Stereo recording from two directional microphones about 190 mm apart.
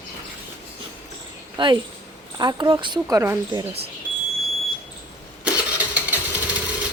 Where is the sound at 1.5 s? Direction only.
25° right (ahead or behind).